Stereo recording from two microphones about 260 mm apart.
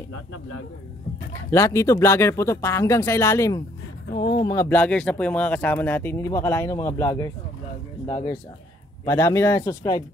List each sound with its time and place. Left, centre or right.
0.1 s a man's voice: left
1.3 s speech: centre